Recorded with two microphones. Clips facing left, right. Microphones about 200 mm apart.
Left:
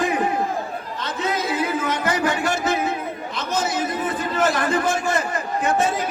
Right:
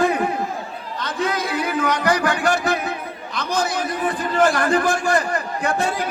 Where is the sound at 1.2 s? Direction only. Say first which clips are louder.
Even; 20° left (ahead or behind).